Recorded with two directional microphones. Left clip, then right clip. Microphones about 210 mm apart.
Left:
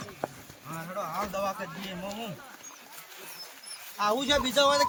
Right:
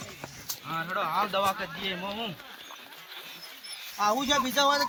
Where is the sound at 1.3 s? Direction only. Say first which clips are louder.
Right 4 dB; 20° right (ahead or behind).